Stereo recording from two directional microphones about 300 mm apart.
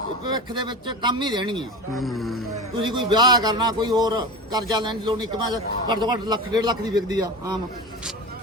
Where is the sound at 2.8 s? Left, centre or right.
Centre.